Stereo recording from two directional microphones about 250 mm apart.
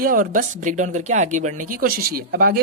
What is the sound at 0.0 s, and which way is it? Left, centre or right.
Speech, right.